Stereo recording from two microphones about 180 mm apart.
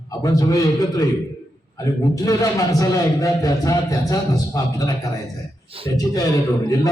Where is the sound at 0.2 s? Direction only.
20° left (ahead or behind).